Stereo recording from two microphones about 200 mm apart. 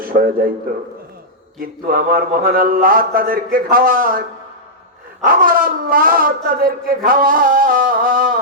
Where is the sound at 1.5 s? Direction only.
45° right (ahead or behind).